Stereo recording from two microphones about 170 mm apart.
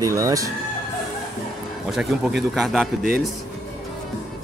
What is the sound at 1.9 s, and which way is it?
Speech, 5° right (ahead or behind).